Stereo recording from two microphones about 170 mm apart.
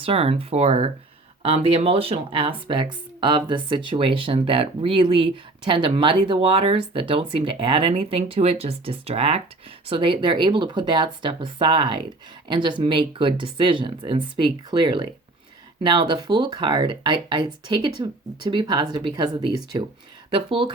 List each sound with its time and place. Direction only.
0.0 s speech: 35° right (ahead or behind)